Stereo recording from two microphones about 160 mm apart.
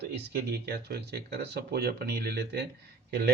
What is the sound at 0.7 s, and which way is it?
Speech, 80° right.